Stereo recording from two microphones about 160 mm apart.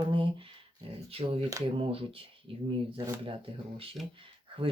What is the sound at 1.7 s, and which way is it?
Speech, 35° right (ahead or behind).